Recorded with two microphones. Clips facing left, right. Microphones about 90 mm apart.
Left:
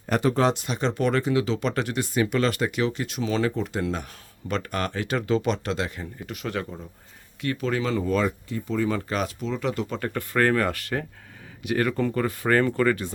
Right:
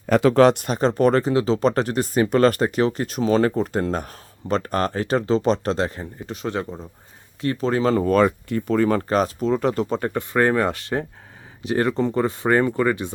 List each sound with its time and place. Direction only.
0.2 s speech: 85° right; by 9.0 s 65° right (ahead or behind)
9.0 s speech: 40° right (ahead or behind)
9.9 s speech: 25° right (ahead or behind)